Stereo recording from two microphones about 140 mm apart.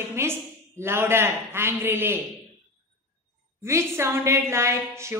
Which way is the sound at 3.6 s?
20° right (ahead or behind).